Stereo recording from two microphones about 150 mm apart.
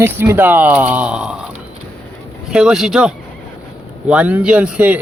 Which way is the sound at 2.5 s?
5° right (ahead or behind).